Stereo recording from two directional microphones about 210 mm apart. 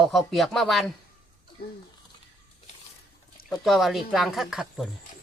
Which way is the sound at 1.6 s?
45° left (ahead or behind).